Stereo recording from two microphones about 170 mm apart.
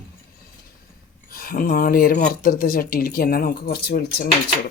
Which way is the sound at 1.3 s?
55° left (ahead or behind).